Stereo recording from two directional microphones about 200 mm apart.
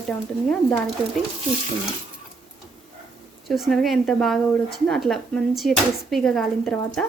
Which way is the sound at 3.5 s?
Centre (ahead or behind).